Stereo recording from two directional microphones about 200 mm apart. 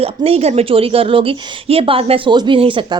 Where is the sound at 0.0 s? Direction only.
30° right (ahead or behind).